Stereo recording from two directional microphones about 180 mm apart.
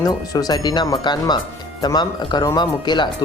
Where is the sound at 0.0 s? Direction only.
20° left (ahead or behind).